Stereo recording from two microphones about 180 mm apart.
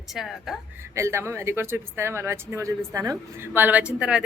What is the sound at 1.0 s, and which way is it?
A woman's voice, 15° right (ahead or behind).